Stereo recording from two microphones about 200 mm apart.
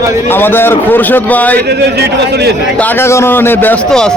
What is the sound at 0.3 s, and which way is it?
A man's voice, 10° left (ahead or behind).